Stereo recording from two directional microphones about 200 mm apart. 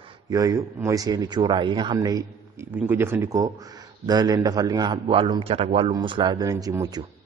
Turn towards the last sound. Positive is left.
turn(degrees=-20)  # may be behind; listen again after turning